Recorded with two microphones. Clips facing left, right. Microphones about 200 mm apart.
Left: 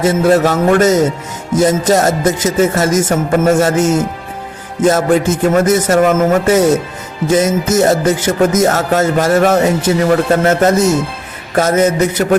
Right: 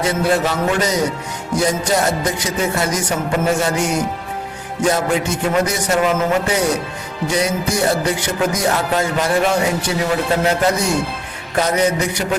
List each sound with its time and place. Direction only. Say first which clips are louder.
0.0 s speech: left 7 dB; 45° left (ahead or behind)